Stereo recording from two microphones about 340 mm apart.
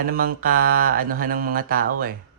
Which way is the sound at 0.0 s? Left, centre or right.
Right.